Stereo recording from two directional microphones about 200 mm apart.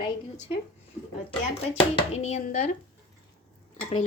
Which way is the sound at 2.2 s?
35° left (ahead or behind).